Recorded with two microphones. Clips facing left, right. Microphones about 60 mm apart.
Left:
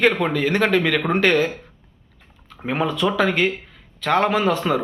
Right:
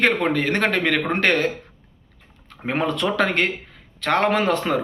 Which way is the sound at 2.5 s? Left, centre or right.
Right.